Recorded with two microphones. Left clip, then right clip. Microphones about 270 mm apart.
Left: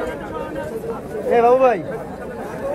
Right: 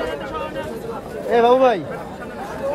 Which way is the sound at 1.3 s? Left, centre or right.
Right.